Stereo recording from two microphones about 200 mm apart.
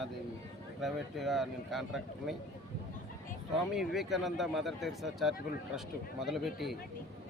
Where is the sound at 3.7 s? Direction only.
Centre (ahead or behind).